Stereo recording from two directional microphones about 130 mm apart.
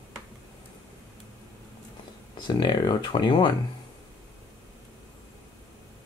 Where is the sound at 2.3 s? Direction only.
35° left (ahead or behind).